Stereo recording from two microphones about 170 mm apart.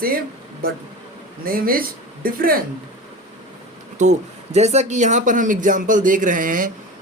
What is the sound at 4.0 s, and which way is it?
Speech, 40° right (ahead or behind).